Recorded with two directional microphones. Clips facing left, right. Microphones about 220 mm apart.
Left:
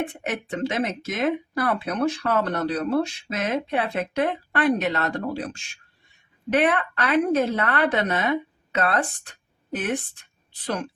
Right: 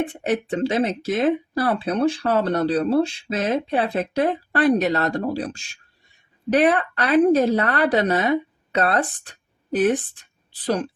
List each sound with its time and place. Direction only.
0.2 s speech: 35° right (ahead or behind)